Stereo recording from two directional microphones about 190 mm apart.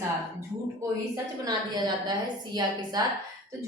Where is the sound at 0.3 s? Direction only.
15° right (ahead or behind).